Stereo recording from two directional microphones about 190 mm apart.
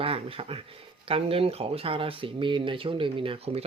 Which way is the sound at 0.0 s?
30° right (ahead or behind).